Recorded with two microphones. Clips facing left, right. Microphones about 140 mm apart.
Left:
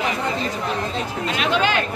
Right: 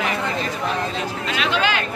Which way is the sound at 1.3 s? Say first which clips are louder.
Left 1 dB; 40° left (ahead or behind).